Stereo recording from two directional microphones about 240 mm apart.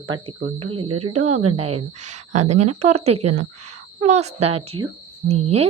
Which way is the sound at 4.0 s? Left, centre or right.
Right.